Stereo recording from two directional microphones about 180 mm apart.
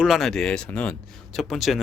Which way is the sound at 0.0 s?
Centre (ahead or behind).